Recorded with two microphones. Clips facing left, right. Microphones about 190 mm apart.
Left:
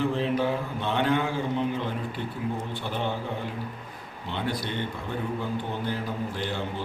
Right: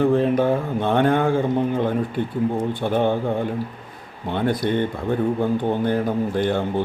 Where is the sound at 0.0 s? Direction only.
55° right (ahead or behind).